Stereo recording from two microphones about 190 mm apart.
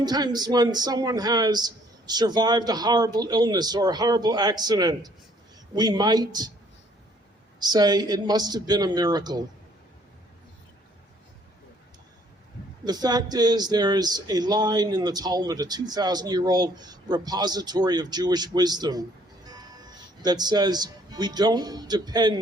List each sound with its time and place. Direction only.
0.0 s speech: 20° right (ahead or behind)
7.6 s speech: 20° right (ahead or behind)
12.8 s speech: 20° right (ahead or behind)